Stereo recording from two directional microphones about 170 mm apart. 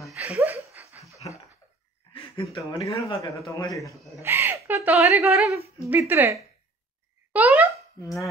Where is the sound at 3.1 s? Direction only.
20° left (ahead or behind).